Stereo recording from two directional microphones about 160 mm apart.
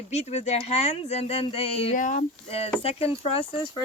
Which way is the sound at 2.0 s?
55° left (ahead or behind).